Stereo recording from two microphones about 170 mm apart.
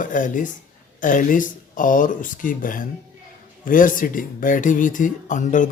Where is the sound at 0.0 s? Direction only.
50° left (ahead or behind).